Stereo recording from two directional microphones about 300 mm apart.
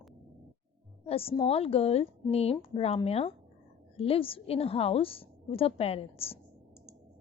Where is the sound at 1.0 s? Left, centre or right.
Centre.